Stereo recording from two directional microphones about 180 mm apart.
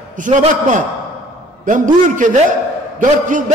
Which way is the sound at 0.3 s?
45° right (ahead or behind).